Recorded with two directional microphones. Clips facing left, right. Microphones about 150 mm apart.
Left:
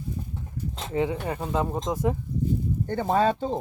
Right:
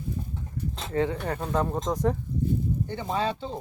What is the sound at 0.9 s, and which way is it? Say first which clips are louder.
Speech: left 1 dB; 15° left (ahead or behind).